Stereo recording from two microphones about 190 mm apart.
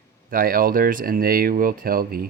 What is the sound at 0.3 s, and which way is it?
Speech, 50° right (ahead or behind).